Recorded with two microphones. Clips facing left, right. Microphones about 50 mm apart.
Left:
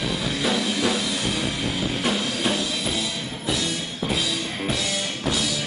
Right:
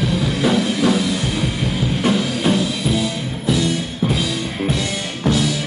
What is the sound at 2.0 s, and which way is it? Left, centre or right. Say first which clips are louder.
Music: right 8 dB; centre.